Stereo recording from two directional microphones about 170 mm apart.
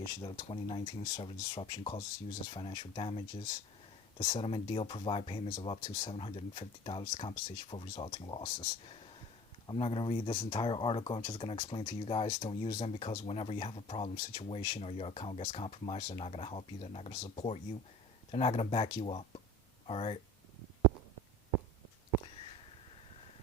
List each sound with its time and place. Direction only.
0.2 s speech: 25° left (ahead or behind)
6.1 s speech: 35° left (ahead or behind)
21.5 s a sound: 15° right (ahead or behind)